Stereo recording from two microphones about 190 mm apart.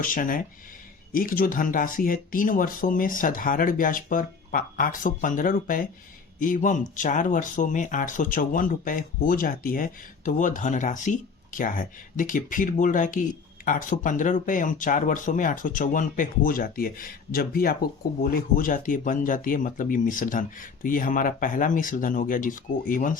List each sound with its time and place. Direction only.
0.0 s speech: 45° left (ahead or behind)